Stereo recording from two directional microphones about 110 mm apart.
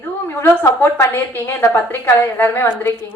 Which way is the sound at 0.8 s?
20° left (ahead or behind).